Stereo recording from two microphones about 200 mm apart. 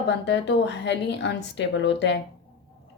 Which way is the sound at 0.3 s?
60° left (ahead or behind).